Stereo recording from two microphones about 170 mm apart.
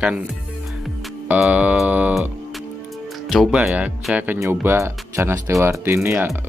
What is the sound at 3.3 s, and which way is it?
Speech, 5° right (ahead or behind).